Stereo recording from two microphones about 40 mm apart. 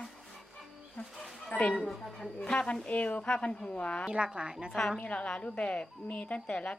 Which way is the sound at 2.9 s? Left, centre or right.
Left.